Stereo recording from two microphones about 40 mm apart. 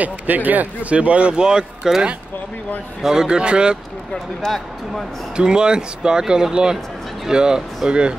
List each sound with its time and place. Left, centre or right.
0.0 s speech: right
0.8 s speech: right
3.0 s a man's voice: centre
3.3 s speech: right
5.3 s speech: right